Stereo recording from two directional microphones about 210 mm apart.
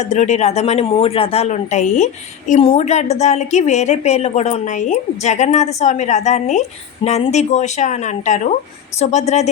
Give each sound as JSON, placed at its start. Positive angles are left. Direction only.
{"t": 0.0, "sound": "a woman's voice", "side_deg": 35}